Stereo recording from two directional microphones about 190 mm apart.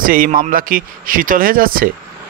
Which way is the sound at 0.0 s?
50° right (ahead or behind).